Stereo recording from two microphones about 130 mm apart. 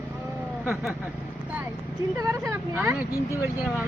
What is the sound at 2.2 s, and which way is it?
Speech, 25° right (ahead or behind).